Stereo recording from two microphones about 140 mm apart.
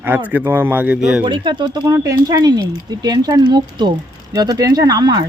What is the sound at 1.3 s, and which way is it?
Speech, 35° right (ahead or behind).